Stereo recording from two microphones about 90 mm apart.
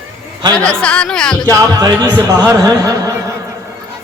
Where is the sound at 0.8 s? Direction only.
10° left (ahead or behind).